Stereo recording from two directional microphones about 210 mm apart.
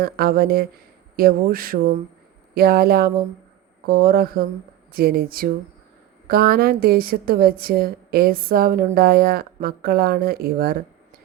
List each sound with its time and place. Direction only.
0.0 s a woman's voice: 45° right (ahead or behind)